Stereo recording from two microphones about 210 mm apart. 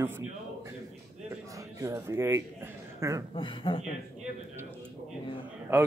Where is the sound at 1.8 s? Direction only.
15° right (ahead or behind).